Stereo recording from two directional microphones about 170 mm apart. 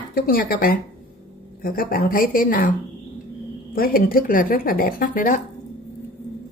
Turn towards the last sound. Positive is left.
turn(degrees=55)  # may be behind; listen again after turning